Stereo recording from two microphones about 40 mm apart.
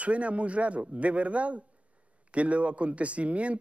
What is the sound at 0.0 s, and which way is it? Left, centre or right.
A man's voice, right.